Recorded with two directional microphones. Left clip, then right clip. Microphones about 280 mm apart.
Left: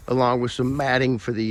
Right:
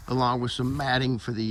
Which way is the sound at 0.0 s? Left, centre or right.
Centre.